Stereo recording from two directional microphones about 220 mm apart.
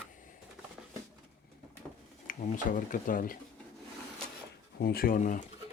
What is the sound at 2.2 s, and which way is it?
Speech, 35° left (ahead or behind).